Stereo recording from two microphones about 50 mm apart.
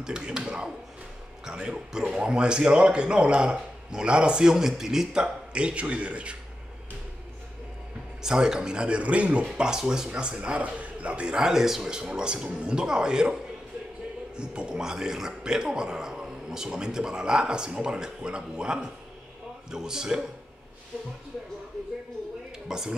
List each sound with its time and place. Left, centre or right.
0.0 s speech: centre
8.2 s speech: centre
22.7 s speech: centre